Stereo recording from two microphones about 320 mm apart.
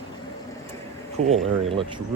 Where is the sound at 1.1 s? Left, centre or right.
Centre.